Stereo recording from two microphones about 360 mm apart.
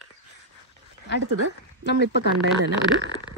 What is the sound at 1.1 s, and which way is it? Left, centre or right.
Speech, left.